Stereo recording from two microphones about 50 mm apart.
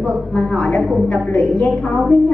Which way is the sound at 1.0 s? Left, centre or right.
Left.